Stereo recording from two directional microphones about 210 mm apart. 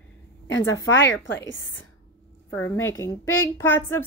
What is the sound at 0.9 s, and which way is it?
Speech, 60° left (ahead or behind).